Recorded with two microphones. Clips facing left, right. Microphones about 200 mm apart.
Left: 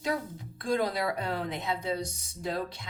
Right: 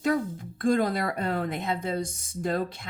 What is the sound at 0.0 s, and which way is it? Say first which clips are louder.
Speech: right 6 dB; 50° right (ahead or behind).